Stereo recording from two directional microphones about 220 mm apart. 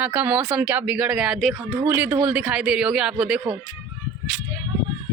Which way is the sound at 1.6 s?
20° right (ahead or behind).